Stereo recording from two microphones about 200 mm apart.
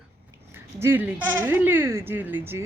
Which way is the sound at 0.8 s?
10° right (ahead or behind).